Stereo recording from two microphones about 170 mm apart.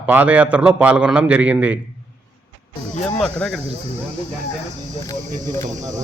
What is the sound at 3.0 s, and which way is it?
Speech, 5° left (ahead or behind).